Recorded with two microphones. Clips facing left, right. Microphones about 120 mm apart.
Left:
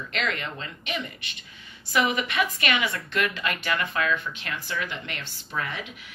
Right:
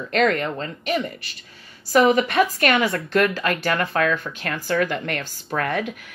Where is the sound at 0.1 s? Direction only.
45° right (ahead or behind).